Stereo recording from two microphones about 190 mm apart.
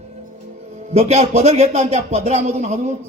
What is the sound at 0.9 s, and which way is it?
A man's voice, 35° right (ahead or behind).